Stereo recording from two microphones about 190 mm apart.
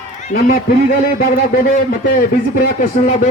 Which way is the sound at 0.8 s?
50° left (ahead or behind).